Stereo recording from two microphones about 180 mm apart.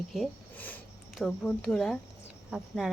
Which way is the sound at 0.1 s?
5° left (ahead or behind).